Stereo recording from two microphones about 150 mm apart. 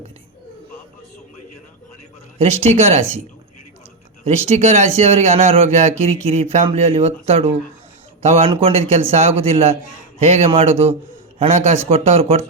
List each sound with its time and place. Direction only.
2.4 s speech: 45° right (ahead or behind)
4.2 s speech: 45° right (ahead or behind)